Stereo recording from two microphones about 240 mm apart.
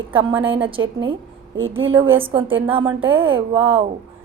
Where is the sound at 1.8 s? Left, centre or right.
Right.